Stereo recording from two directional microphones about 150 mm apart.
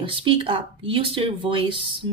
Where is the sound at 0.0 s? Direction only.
35° right (ahead or behind).